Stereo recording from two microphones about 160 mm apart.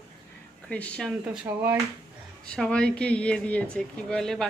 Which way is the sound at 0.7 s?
5° left (ahead or behind).